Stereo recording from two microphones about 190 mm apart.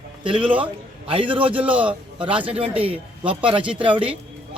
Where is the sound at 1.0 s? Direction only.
30° right (ahead or behind).